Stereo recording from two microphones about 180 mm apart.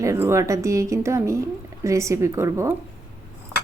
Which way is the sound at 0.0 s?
15° right (ahead or behind).